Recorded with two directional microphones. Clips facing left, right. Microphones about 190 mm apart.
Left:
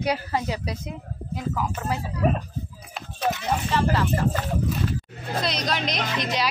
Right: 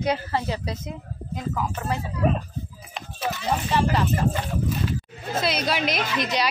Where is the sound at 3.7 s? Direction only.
15° right (ahead or behind).